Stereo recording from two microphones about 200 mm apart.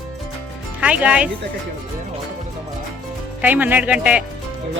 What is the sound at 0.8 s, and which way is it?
Speech, 5° right (ahead or behind).